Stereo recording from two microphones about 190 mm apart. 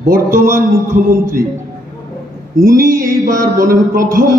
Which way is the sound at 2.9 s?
15° right (ahead or behind).